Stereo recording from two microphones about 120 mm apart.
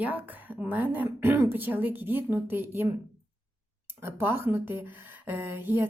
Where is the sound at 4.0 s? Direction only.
20° right (ahead or behind).